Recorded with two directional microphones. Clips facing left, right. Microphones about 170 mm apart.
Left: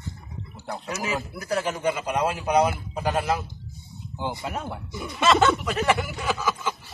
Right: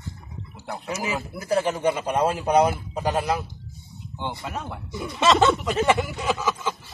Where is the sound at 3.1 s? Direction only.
15° right (ahead or behind).